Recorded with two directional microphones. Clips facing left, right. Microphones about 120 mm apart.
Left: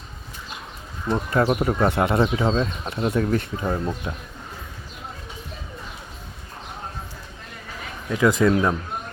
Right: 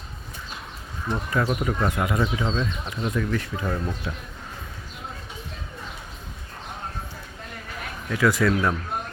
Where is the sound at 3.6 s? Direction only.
20° left (ahead or behind).